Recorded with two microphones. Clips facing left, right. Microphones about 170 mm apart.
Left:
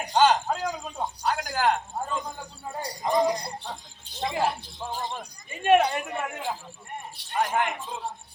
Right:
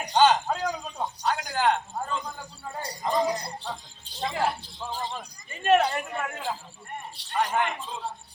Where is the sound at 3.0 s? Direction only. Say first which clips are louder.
Left 2 dB; 15° left (ahead or behind).